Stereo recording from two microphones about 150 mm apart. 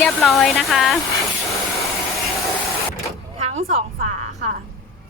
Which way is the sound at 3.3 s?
45° right (ahead or behind).